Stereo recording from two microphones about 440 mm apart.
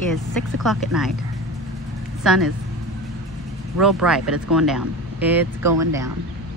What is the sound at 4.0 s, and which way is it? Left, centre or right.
Speech, centre.